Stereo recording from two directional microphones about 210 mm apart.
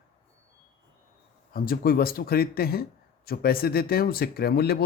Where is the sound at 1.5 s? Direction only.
45° left (ahead or behind).